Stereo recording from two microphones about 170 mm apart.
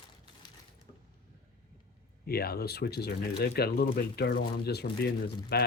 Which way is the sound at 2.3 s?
65° left (ahead or behind).